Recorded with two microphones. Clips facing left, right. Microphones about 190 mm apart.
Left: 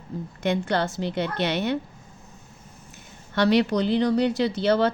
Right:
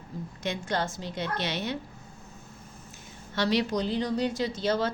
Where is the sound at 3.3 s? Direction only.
60° left (ahead or behind).